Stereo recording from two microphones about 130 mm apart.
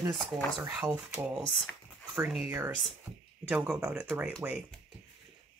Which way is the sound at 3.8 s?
20° right (ahead or behind).